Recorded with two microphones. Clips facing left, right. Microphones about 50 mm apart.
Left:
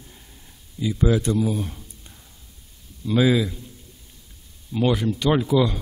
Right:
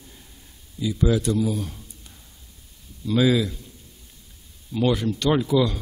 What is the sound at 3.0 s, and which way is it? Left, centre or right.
Speech, centre.